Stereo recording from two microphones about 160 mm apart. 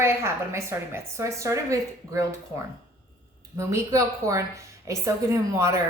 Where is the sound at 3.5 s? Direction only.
20° right (ahead or behind).